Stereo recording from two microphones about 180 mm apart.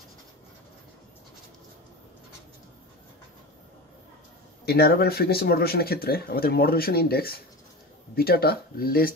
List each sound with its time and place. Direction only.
4.6 s speech: 60° left (ahead or behind)